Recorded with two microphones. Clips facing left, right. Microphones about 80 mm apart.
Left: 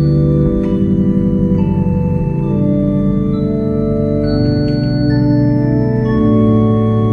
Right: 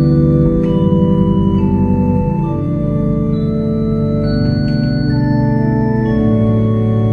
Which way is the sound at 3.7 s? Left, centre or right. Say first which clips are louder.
Left 1 dB; centre.